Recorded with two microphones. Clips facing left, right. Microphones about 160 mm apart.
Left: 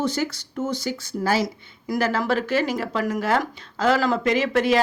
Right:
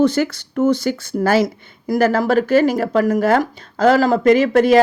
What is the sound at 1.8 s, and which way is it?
A woman's voice, 40° right (ahead or behind).